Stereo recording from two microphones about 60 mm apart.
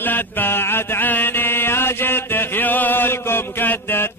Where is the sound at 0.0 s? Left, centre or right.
Left.